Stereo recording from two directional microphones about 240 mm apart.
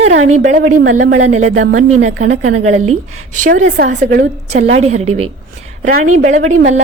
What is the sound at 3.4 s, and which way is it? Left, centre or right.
A woman's voice, right.